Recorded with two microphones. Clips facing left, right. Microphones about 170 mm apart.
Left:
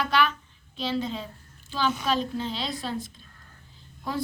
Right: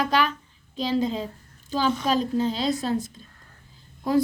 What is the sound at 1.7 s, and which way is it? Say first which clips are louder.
A woman's voice: right 3 dB; 40° right (ahead or behind).